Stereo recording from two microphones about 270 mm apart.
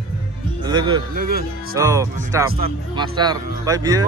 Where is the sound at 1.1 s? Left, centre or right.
Right.